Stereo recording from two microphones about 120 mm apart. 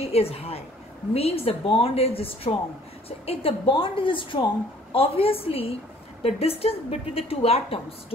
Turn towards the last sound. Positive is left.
turn(degrees=55)  # may be behind; listen again after turning